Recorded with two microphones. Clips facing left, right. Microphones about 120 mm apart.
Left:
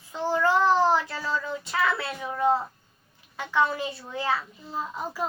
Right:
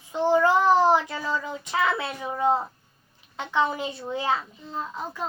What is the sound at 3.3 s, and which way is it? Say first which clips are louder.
A woman's voice: even; 20° right (ahead or behind).